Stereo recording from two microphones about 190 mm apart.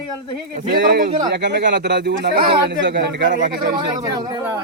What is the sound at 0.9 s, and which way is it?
A man's voice, 60° right (ahead or behind).